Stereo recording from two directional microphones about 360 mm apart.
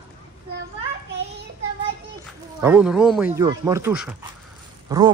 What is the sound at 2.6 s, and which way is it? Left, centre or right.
Speech, centre.